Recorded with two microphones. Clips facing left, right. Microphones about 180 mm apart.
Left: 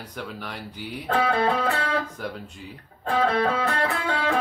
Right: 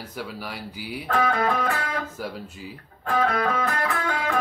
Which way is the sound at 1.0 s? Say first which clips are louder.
Left 1 dB; 30° left (ahead or behind).